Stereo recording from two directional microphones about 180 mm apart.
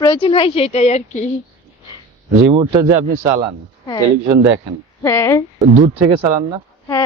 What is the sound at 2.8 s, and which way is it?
Speech, 20° right (ahead or behind).